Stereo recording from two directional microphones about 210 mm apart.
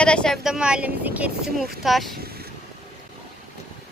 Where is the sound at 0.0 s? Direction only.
5° left (ahead or behind).